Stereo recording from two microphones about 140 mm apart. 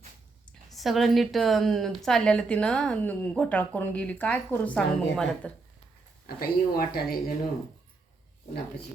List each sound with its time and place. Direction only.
0.7 s a woman's voice: centre (ahead or behind)
6.2 s speech: 90° left